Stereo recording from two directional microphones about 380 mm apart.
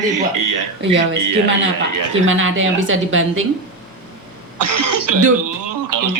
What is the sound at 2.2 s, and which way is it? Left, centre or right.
A woman's voice, right.